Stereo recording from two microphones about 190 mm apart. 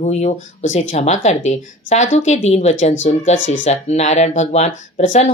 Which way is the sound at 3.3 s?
80° left.